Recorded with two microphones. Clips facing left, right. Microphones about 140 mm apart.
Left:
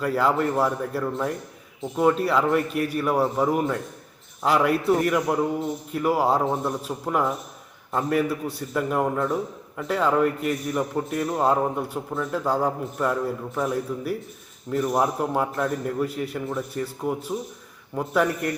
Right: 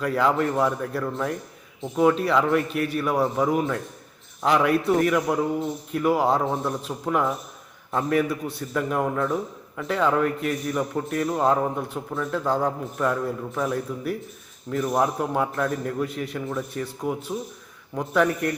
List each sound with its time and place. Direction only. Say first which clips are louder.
0.0 s a man's voice: even; 5° left (ahead or behind)